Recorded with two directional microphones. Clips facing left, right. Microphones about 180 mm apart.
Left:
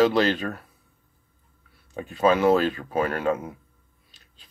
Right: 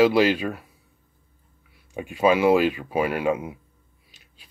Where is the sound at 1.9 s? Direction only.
10° right (ahead or behind).